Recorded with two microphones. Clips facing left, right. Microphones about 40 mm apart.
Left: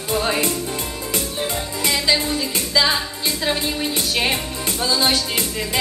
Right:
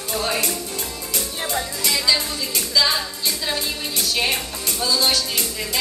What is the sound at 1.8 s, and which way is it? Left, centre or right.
Music, left.